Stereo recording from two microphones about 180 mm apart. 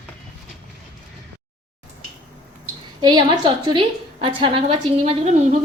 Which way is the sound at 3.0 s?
25° right (ahead or behind).